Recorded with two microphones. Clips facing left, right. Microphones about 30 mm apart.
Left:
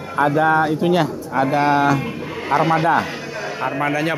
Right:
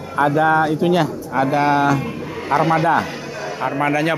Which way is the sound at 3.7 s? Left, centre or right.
Centre.